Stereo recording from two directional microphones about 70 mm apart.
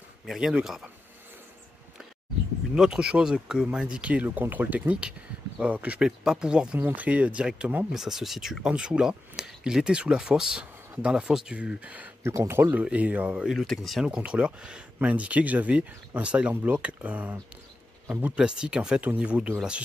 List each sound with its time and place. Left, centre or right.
0.3 s speech: centre
2.7 s speech: centre
7.9 s speech: centre
12.2 s speech: right
12.8 s speech: right
13.5 s speech: centre
14.0 s speech: centre